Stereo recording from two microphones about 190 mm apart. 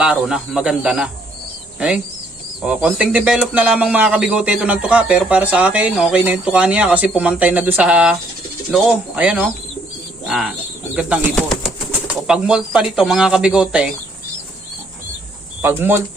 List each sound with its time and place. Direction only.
0.0 s speech: 5° right (ahead or behind)
2.6 s speech: 5° right (ahead or behind)
15.6 s speech: 10° right (ahead or behind)